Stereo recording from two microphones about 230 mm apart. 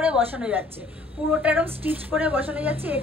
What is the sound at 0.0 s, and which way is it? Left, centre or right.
A woman's voice, centre.